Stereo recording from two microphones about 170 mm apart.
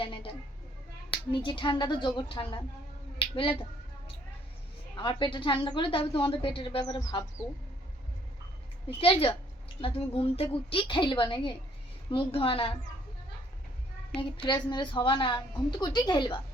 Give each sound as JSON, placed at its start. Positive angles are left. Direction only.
{"t": 0.0, "sound": "a sound", "side_deg": 30}
{"t": 1.3, "sound": "a woman's voice", "side_deg": 30}
{"t": 3.2, "sound": "a sound", "side_deg": 30}
{"t": 4.9, "sound": "a woman's voice", "side_deg": 30}
{"t": 9.0, "sound": "a woman's voice", "side_deg": 35}
{"t": 14.4, "sound": "a woman's voice", "side_deg": 25}